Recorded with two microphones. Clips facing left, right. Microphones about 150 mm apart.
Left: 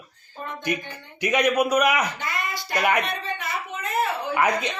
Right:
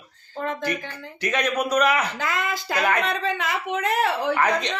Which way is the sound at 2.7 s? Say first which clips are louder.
Even; 90° right.